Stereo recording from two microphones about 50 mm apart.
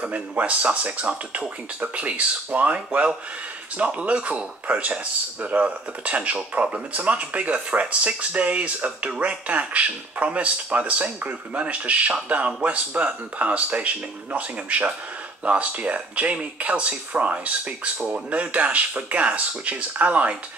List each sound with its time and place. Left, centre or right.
0.0 s speech: right